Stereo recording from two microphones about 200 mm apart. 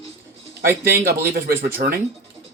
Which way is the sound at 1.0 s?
50° right (ahead or behind).